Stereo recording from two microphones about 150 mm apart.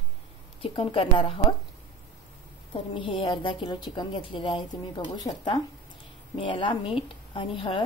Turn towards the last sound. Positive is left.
turn(degrees=35)  # may be behind; listen again after turning